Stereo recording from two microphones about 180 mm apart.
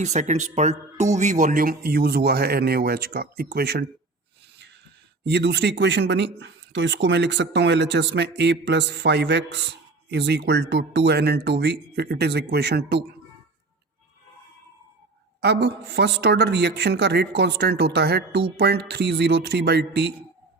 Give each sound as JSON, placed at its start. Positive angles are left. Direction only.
{"t": 0.0, "sound": "speech", "side_deg": -40}
{"t": 5.2, "sound": "speech", "side_deg": -70}
{"t": 15.4, "sound": "speech", "side_deg": -70}